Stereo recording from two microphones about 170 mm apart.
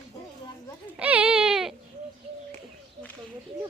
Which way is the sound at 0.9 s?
10° right (ahead or behind).